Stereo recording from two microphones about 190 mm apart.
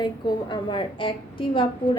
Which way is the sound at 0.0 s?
25° left (ahead or behind).